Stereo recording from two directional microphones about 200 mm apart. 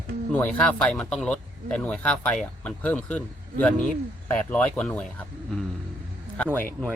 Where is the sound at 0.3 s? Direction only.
5° left (ahead or behind).